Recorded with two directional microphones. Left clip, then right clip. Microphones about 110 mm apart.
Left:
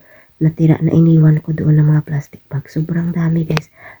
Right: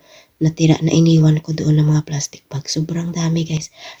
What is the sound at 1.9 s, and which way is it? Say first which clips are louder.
Speech: even; 20° right (ahead or behind).